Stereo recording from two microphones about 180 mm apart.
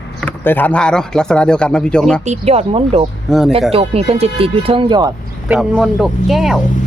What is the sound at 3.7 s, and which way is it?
Speech, 35° right (ahead or behind).